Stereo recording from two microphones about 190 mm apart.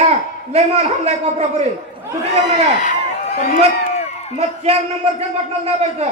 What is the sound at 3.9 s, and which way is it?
Crowd, 35° left (ahead or behind).